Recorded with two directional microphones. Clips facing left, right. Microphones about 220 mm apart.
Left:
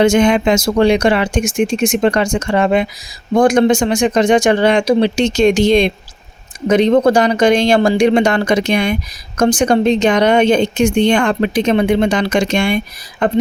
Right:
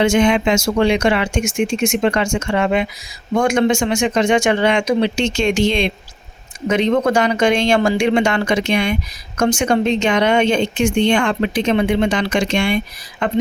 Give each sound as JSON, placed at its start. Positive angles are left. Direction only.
{"t": 0.0, "sound": "speech", "side_deg": 40}